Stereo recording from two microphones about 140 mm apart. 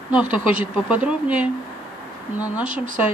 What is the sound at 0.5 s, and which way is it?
Speech, 10° right (ahead or behind).